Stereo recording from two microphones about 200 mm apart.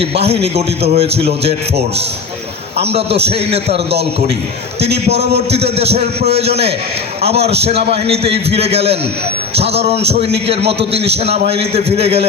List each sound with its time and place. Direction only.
0.0 s a man's voice: 30° right (ahead or behind)
2.8 s a man's voice: 30° right (ahead or behind)
5.0 s a man's voice: 30° right (ahead or behind)